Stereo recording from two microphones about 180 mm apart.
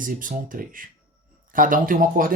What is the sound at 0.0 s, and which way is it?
Speech, 50° right (ahead or behind).